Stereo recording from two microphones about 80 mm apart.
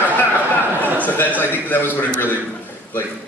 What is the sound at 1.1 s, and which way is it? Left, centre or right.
A man's voice, left.